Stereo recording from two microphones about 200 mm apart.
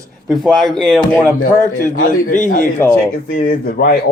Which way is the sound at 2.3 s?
40° left (ahead or behind).